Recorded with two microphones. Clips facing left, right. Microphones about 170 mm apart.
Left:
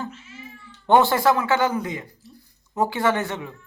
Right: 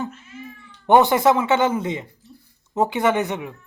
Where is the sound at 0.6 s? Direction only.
20° right (ahead or behind).